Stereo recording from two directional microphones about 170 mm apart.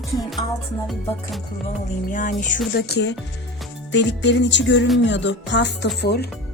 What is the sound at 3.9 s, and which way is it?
Music, 90° left.